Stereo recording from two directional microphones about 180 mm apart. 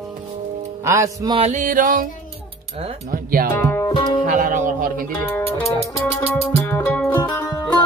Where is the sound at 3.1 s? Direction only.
50° right (ahead or behind).